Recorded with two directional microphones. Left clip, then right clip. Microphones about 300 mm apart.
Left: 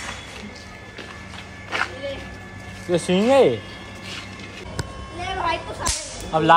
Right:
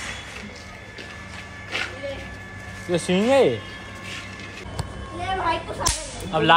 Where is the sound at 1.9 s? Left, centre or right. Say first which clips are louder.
Left 1 dB; centre.